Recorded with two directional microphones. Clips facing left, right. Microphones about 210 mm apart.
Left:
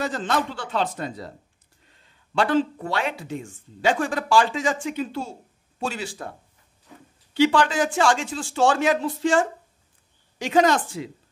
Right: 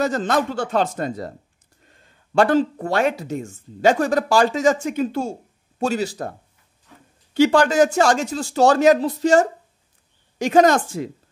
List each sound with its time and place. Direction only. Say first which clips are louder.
0.0 s speech: right 5 dB; 45° right (ahead or behind)
7.3 s speech: right 5 dB; 45° right (ahead or behind)